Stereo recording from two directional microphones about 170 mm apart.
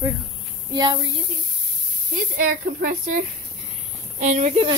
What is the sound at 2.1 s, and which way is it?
Speech, 55° right (ahead or behind).